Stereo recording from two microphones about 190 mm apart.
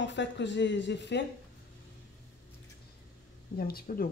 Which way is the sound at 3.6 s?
50° left (ahead or behind).